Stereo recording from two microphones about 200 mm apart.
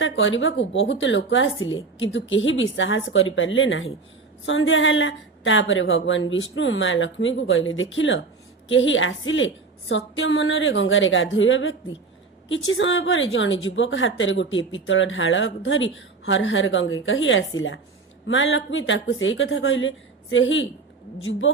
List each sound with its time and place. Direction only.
0.0 s speech: 70° left (ahead or behind)